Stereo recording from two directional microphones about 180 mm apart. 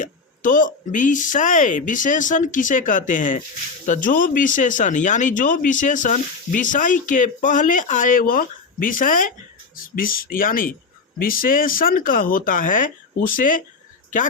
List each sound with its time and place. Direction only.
0.0 s speech: 45° left (ahead or behind)